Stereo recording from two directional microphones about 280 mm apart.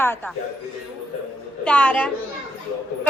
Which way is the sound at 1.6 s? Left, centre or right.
Centre.